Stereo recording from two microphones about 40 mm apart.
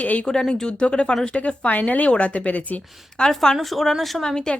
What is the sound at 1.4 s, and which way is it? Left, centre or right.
Speech, left.